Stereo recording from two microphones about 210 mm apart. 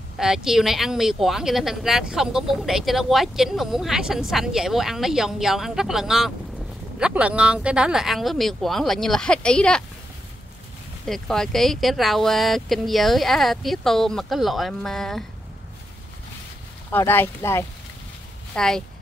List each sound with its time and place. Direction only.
0.2 s speech: centre (ahead or behind)
11.1 s speech: 5° left (ahead or behind)
16.9 s speech: 10° left (ahead or behind)